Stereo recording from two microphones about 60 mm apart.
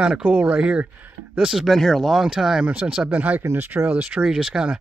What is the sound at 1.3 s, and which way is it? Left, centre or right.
Speech, centre.